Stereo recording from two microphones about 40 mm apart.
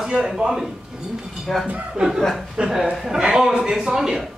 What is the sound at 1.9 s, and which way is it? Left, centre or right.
Speech, centre.